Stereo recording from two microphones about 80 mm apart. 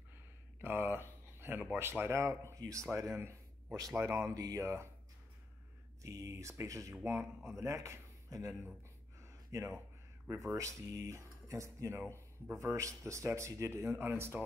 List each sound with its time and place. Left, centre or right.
0.6 s speech: right
6.0 s speech: right
9.2 s a sound: right
10.2 s speech: right